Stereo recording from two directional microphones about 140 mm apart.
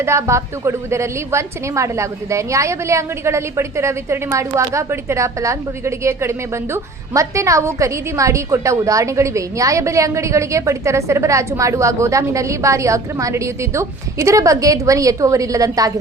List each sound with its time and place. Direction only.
0.0 s a woman's voice: 20° right (ahead or behind)